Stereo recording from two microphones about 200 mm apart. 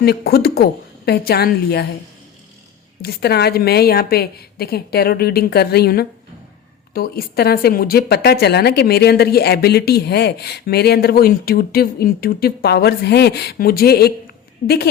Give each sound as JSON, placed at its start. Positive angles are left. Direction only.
{"t": 0.0, "sound": "speech", "side_deg": 50}
{"t": 3.0, "sound": "speech", "side_deg": 50}